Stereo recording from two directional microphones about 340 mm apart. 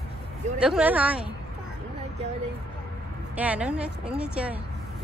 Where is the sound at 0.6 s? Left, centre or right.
Centre.